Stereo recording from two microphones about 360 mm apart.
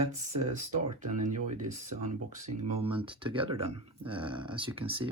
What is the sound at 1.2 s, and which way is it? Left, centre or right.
Speech, right.